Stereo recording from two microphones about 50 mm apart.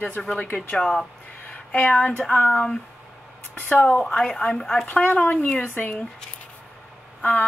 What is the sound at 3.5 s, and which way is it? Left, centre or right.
Speech, left.